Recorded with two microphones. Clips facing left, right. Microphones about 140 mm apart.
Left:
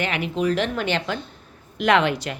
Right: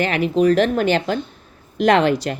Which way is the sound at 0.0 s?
40° right (ahead or behind).